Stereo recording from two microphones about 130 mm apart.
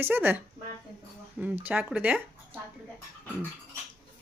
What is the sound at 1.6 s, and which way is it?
Speech, 15° right (ahead or behind).